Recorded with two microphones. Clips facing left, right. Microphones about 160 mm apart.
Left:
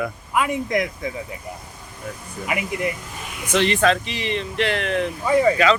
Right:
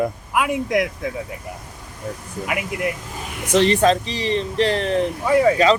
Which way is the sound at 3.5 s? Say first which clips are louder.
Right 3 dB; 40° right (ahead or behind).